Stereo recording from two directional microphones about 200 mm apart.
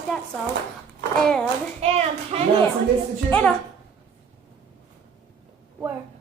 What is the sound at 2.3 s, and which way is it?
Speech, 30° right (ahead or behind).